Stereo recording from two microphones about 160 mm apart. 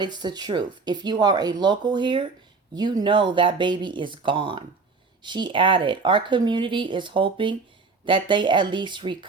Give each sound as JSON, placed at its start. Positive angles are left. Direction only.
{"t": 0.0, "sound": "speech", "side_deg": -25}